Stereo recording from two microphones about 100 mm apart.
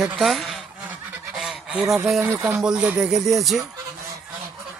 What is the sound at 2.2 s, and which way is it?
Speech, 20° right (ahead or behind).